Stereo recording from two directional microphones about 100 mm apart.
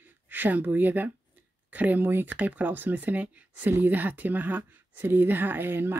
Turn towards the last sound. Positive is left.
turn(degrees=-20)  # may be behind; listen again after turning